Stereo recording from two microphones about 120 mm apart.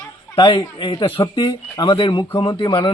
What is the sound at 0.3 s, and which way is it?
Speech, 45° left (ahead or behind).